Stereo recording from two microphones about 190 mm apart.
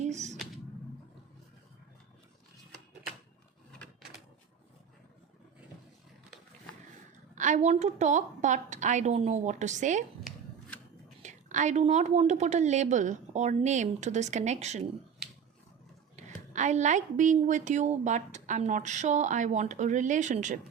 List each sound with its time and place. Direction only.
0.0 s a sound: 35° right (ahead or behind)
7.3 s a woman's voice: 40° right (ahead or behind)
11.2 s a woman's voice: 40° right (ahead or behind)
16.1 s a woman's voice: 40° right (ahead or behind)